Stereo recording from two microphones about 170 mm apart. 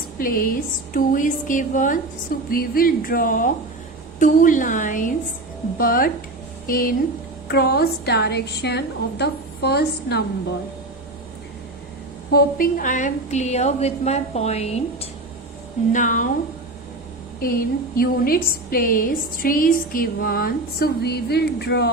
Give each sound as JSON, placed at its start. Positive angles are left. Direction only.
{"t": 0.2, "sound": "a woman's voice", "side_deg": 55}
{"t": 7.4, "sound": "a woman's voice", "side_deg": 70}
{"t": 12.3, "sound": "a woman's voice", "side_deg": 55}
{"t": 15.9, "sound": "speech", "side_deg": 50}
{"t": 17.4, "sound": "a woman's voice", "side_deg": 60}